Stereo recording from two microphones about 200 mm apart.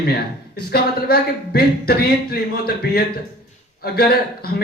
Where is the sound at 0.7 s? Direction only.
55° left (ahead or behind).